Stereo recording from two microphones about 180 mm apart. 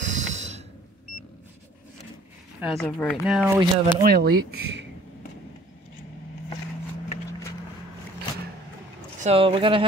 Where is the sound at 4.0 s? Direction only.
60° right (ahead or behind).